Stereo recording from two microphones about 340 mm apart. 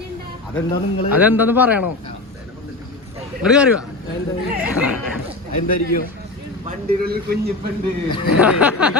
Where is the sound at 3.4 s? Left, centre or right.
Centre.